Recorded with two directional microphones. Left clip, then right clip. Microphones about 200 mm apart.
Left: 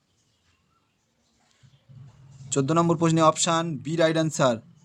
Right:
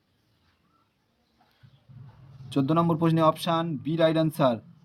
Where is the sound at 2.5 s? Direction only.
25° left (ahead or behind).